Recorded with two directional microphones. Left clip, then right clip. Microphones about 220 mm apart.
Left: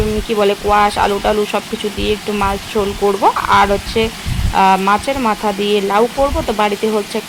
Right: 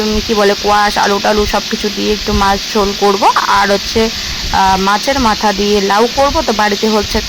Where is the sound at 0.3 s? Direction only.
20° right (ahead or behind).